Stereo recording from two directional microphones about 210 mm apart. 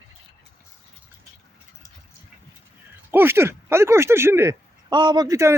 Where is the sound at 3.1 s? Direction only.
10° right (ahead or behind).